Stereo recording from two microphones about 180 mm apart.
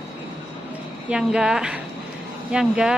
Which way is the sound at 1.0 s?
5° right (ahead or behind).